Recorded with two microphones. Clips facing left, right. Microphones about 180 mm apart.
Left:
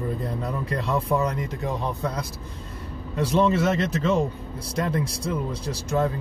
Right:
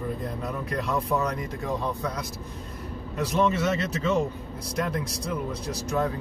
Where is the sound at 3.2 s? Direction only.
30° left (ahead or behind).